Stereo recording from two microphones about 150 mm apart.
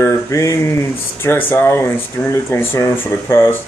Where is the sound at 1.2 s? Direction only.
15° left (ahead or behind).